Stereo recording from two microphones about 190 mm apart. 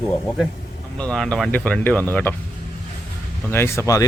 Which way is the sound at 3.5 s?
15° left (ahead or behind).